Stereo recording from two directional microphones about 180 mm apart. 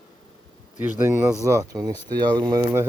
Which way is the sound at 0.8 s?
10° right (ahead or behind).